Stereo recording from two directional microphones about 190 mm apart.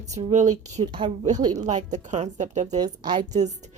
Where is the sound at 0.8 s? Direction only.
25° right (ahead or behind).